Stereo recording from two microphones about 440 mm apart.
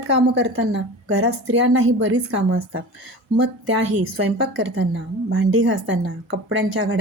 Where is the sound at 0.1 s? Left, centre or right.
Right.